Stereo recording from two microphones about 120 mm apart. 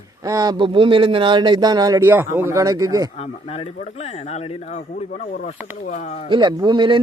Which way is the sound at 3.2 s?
60° left (ahead or behind).